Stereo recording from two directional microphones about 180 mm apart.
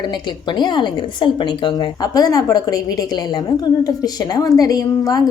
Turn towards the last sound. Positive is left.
turn(degrees=20)  # may be behind; listen again after turning